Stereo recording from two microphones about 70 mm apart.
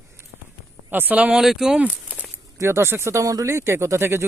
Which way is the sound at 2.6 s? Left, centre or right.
Right.